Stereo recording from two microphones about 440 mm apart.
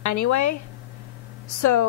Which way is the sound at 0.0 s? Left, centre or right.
Left.